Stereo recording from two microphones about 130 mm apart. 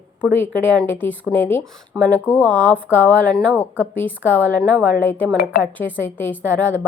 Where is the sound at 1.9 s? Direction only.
10° right (ahead or behind).